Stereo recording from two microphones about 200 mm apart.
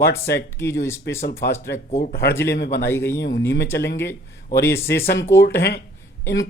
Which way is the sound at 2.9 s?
10° left (ahead or behind).